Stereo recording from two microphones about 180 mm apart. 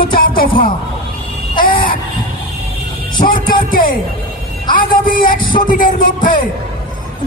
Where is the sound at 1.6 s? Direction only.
50° left (ahead or behind).